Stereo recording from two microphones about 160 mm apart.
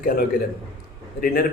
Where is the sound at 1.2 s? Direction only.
70° left (ahead or behind).